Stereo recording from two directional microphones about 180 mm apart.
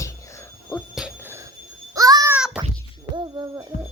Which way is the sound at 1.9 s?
20° right (ahead or behind).